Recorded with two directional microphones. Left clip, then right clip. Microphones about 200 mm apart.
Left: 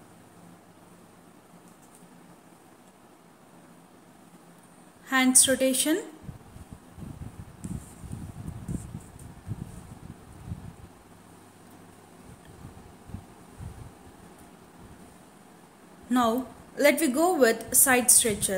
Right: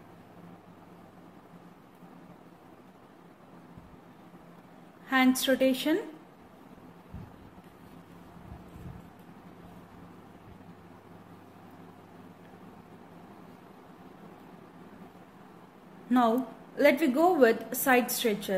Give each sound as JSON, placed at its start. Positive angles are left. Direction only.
{"t": 5.0, "sound": "a sound", "side_deg": 10}
{"t": 5.4, "sound": "a woman's voice", "side_deg": 10}
{"t": 16.1, "sound": "a woman's voice", "side_deg": 10}